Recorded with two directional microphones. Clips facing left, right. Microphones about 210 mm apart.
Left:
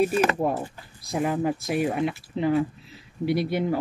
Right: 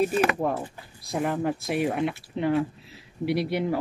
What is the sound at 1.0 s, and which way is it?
Speech, centre (ahead or behind).